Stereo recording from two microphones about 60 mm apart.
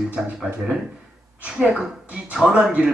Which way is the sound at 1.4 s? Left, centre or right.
Centre.